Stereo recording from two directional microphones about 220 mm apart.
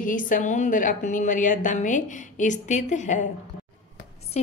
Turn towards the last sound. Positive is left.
turn(degrees=35)  # may be behind; listen again after turning